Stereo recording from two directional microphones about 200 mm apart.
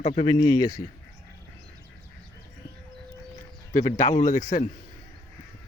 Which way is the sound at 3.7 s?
35° left (ahead or behind).